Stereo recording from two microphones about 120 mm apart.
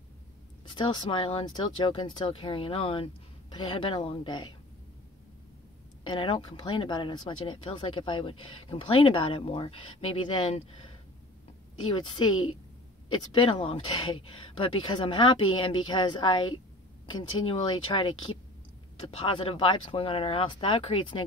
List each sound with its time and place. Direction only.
0.7 s a woman's voice: 45° left (ahead or behind)
6.0 s speech: 45° left (ahead or behind)
12.2 s speech: 45° left (ahead or behind)